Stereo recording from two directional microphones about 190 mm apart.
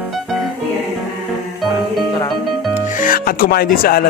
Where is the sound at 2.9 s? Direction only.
45° left (ahead or behind).